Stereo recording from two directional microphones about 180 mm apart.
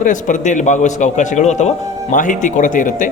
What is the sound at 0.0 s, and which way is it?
A man's voice, 45° left (ahead or behind).